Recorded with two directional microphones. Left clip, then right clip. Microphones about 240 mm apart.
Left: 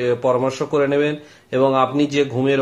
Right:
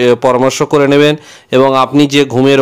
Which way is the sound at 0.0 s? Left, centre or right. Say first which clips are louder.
Right 9 dB; right.